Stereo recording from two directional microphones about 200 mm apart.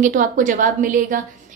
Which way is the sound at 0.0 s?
40° right (ahead or behind).